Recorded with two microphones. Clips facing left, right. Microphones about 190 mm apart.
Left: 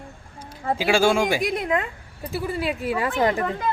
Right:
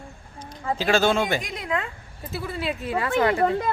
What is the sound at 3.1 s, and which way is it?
Speech, 35° left (ahead or behind).